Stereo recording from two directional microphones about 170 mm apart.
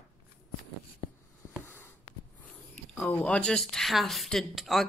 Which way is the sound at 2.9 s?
10° left (ahead or behind).